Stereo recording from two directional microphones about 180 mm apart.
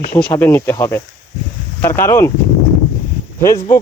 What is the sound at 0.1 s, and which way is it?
Speech, 10° left (ahead or behind).